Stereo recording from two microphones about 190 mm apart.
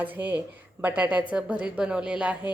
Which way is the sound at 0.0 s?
10° right (ahead or behind).